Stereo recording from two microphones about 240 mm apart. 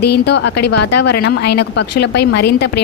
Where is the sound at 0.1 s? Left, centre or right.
Left.